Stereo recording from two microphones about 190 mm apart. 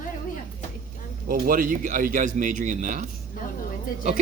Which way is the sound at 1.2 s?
50° right (ahead or behind).